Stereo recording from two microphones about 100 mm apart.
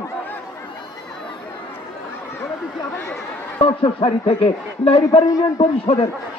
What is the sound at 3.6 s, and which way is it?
Speech, 65° left (ahead or behind).